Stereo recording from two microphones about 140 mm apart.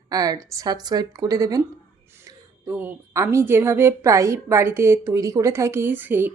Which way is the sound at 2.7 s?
15° right (ahead or behind).